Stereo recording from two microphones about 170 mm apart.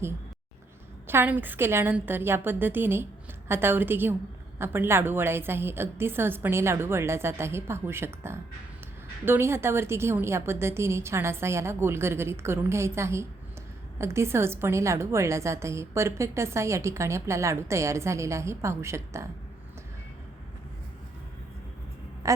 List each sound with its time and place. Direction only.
1.0 s a woman's voice: 10° right (ahead or behind)